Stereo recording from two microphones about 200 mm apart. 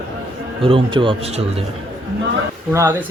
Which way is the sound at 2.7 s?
15° right (ahead or behind).